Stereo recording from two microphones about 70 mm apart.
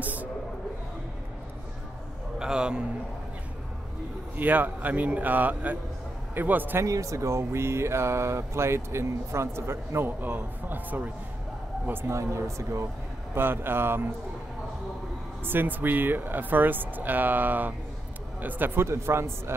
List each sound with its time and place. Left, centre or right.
0.0 s a sound: right
2.3 s a man's voice: centre
4.4 s speech: right
6.8 s speech: right
13.3 s speech: right
15.4 s speech: right
18.9 s speech: right